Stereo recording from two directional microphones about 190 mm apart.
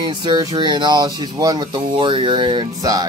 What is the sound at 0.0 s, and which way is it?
Speech, 25° right (ahead or behind).